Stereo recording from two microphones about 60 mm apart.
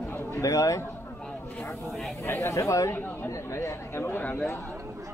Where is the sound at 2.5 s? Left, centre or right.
Left.